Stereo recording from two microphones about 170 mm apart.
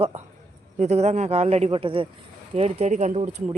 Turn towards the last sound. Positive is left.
turn(degrees=-40)  # may be behind; listen again after turning